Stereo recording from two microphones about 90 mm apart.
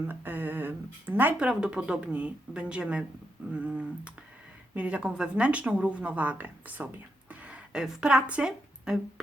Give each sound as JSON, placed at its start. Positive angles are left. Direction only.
{"t": 0.1, "sound": "speech", "side_deg": -20}